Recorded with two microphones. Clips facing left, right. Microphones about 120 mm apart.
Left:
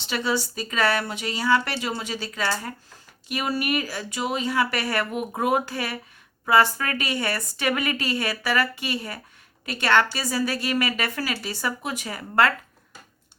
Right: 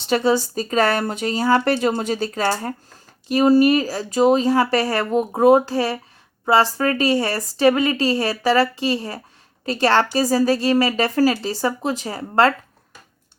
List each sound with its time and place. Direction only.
0.1 s speech: 40° right (ahead or behind)